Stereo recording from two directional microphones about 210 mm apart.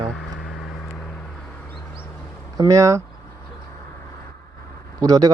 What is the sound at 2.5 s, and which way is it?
Speech, 15° right (ahead or behind).